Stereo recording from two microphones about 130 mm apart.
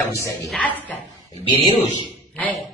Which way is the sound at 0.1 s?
25° left (ahead or behind).